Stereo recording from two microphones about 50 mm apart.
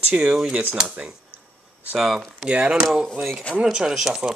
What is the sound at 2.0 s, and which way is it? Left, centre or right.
Speech, centre.